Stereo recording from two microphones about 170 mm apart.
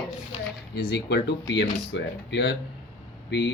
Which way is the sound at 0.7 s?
75° left (ahead or behind).